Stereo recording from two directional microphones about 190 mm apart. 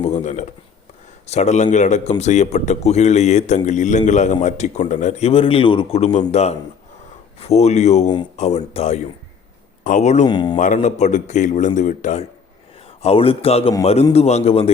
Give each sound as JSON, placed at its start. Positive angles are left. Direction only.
{"t": 0.0, "sound": "a man's voice", "side_deg": 40}
{"t": 8.0, "sound": "speech", "side_deg": 25}
{"t": 8.4, "sound": "a man's voice", "side_deg": 35}
{"t": 10.2, "sound": "speech", "side_deg": 25}
{"t": 10.8, "sound": "a man's voice", "side_deg": 40}